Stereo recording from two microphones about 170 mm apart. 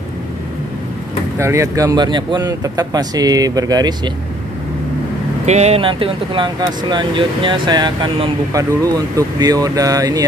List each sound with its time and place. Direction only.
1.4 s speech: 15° right (ahead or behind)
5.4 s speech: 40° right (ahead or behind); by 10.2 s 20° right (ahead or behind)